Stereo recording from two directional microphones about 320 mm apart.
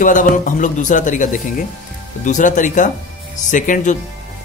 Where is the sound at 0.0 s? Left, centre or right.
Left.